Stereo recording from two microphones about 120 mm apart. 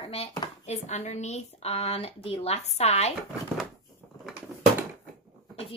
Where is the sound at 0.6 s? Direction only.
70° left (ahead or behind).